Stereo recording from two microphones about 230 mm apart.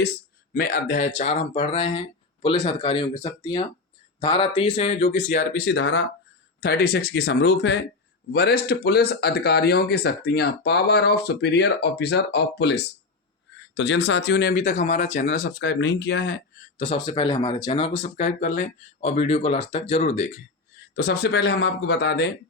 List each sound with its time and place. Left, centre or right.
0.5 s speech: left
16.7 s speech: left
20.9 s speech: left